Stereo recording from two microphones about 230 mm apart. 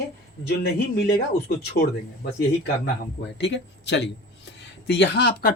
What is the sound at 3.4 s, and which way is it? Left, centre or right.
Speech, left.